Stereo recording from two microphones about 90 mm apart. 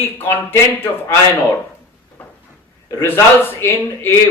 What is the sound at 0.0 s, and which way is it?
Speech, 25° left (ahead or behind).